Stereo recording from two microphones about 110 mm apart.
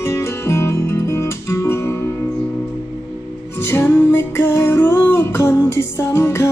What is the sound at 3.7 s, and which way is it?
Music, 20° left (ahead or behind).